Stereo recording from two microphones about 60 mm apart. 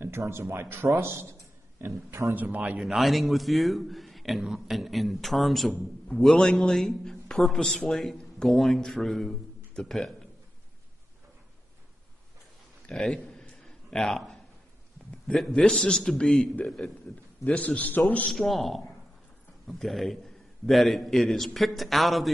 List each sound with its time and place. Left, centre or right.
0.0 s speech: right
2.3 s a man's voice: right
2.8 s a man's voice: centre
12.9 s a sound: centre
15.3 s a man's voice: centre
17.6 s a man's voice: left
18.3 s a man's voice: centre